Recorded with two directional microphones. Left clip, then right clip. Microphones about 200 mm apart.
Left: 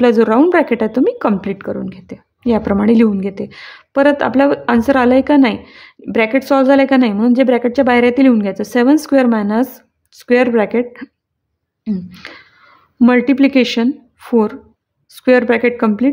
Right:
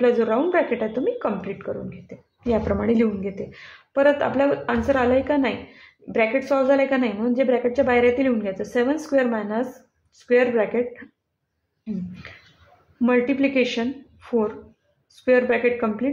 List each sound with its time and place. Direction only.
0.0 s a woman's voice: 50° left (ahead or behind)